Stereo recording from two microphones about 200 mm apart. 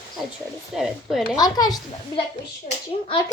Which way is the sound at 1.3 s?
20° left (ahead or behind).